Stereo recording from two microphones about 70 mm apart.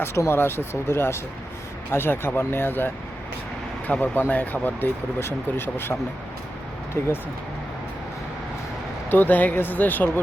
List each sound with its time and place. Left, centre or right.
0.0 s speech: left
9.0 s speech: left